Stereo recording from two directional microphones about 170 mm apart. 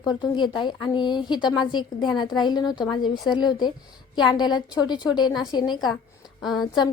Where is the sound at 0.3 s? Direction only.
25° left (ahead or behind).